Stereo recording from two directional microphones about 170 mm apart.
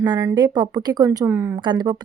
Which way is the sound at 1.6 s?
25° right (ahead or behind).